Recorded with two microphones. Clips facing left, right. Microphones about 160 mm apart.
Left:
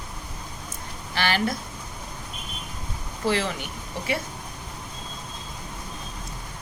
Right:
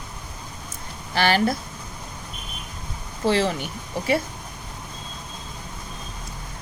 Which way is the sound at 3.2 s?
30° right (ahead or behind).